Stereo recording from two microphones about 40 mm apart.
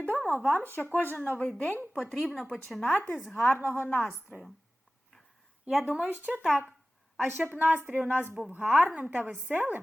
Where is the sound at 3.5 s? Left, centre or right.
Left.